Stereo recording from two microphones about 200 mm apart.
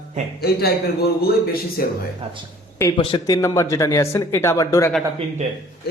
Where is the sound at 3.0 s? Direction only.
20° left (ahead or behind).